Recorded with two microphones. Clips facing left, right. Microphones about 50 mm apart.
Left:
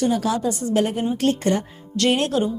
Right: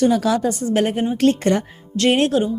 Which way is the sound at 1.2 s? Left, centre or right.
Right.